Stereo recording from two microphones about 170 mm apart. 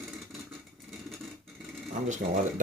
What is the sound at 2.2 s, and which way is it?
Speech, 55° right (ahead or behind).